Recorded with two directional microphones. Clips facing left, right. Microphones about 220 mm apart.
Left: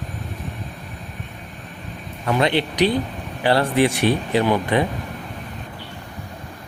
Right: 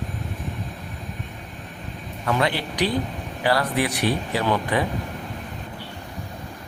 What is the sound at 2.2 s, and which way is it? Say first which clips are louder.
A man's voice: left 4 dB; 25° left (ahead or behind).